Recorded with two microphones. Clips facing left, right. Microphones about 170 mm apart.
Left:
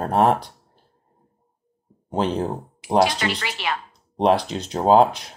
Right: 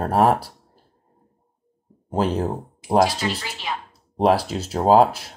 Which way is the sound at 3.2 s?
70° left (ahead or behind).